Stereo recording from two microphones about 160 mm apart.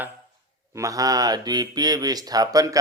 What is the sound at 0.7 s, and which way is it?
Speech, 20° right (ahead or behind).